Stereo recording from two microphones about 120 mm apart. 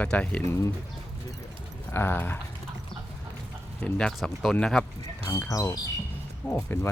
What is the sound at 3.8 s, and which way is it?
Speech, 5° left (ahead or behind).